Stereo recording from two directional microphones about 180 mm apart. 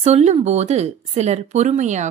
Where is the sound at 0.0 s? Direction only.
35° right (ahead or behind).